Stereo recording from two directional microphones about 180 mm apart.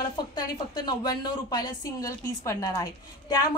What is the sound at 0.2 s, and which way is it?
A woman's voice, 25° left (ahead or behind).